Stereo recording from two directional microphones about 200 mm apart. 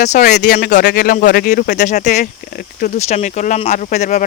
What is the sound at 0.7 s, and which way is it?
Speech, 50° left (ahead or behind).